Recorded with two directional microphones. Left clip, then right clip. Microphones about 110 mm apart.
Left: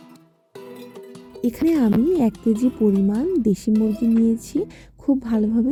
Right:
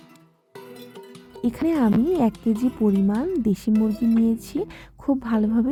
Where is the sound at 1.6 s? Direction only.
25° left (ahead or behind).